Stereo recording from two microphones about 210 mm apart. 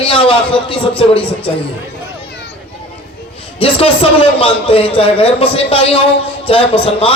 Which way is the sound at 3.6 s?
25° left (ahead or behind).